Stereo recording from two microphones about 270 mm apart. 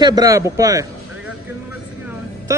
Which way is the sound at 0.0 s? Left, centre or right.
Centre.